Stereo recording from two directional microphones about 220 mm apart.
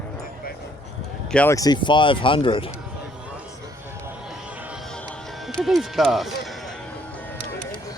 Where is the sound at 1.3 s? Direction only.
10° left (ahead or behind).